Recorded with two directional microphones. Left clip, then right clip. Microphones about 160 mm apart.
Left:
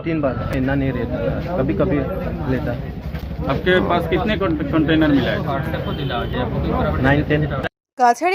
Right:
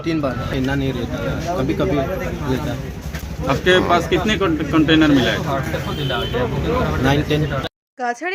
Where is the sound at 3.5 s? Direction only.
70° right (ahead or behind).